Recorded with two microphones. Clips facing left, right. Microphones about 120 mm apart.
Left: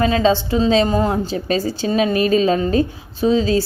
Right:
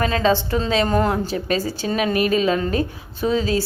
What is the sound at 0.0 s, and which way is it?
A woman's voice, 25° left (ahead or behind).